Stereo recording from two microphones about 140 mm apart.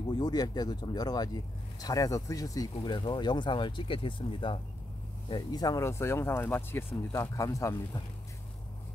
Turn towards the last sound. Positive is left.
turn(degrees=25)  # may be behind; listen again after turning